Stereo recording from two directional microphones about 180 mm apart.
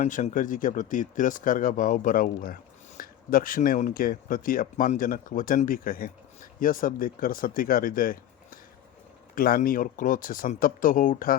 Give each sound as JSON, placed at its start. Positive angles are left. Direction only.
{"t": 0.0, "sound": "speech", "side_deg": 45}